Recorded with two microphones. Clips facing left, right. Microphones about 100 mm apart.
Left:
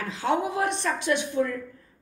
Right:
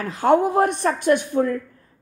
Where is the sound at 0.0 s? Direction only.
50° right (ahead or behind).